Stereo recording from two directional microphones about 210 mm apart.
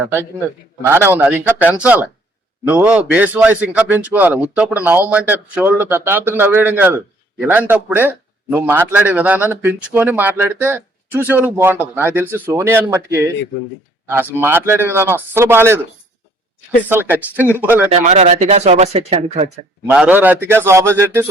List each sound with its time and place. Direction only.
0.8 s a man's voice: 10° right (ahead or behind)
16.9 s a man's voice: 10° right (ahead or behind)
17.9 s speech: 30° right (ahead or behind)
19.9 s a man's voice: 5° right (ahead or behind)